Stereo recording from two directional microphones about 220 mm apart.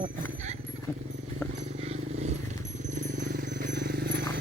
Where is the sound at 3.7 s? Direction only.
50° right (ahead or behind).